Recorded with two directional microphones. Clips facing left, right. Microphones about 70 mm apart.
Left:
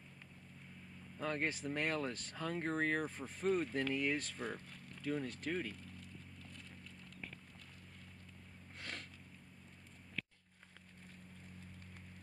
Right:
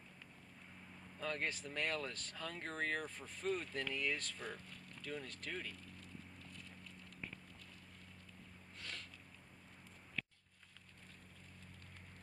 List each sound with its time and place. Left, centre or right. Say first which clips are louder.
1.2 s speech: left 3 dB; centre